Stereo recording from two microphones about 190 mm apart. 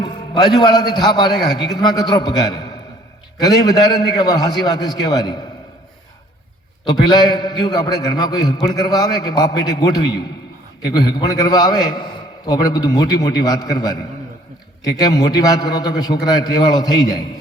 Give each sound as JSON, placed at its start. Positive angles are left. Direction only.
{"t": 0.0, "sound": "a man's voice", "side_deg": 20}
{"t": 6.8, "sound": "a man's voice", "side_deg": 20}